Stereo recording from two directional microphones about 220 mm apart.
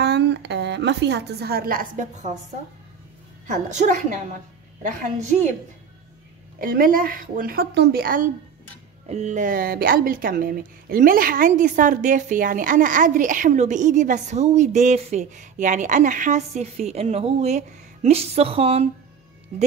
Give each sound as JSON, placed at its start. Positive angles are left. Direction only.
{"t": 0.0, "sound": "a woman's voice", "side_deg": -50}
{"t": 3.4, "sound": "speech", "side_deg": -35}
{"t": 6.6, "sound": "speech", "side_deg": -40}